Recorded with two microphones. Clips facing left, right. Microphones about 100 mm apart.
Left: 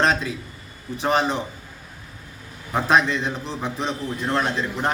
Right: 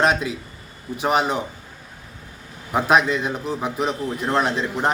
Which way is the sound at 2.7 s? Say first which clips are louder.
Right 1 dB; 10° right (ahead or behind).